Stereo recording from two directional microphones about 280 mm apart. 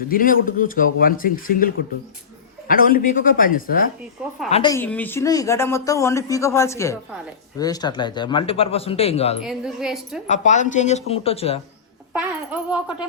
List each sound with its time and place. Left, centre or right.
0.1 s speech: left
4.4 s a woman's voice: centre
9.4 s a woman's voice: centre
10.2 s speech: left
12.5 s a woman's voice: centre